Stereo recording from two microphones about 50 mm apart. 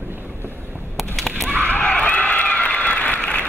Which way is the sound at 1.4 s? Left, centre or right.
Right.